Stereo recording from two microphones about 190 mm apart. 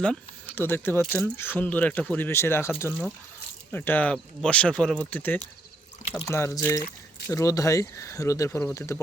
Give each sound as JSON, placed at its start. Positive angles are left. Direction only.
{"t": 0.0, "sound": "speech", "side_deg": 5}